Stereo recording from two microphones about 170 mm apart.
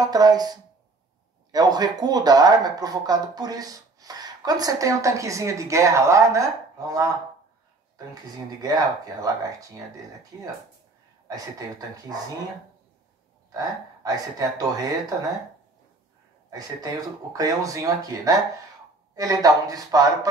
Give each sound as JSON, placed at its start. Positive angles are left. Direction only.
{"t": 0.0, "sound": "speech", "side_deg": -20}
{"t": 8.6, "sound": "speech", "side_deg": -20}
{"t": 11.2, "sound": "speech", "side_deg": -20}
{"t": 13.5, "sound": "speech", "side_deg": -20}
{"t": 16.4, "sound": "speech", "side_deg": -20}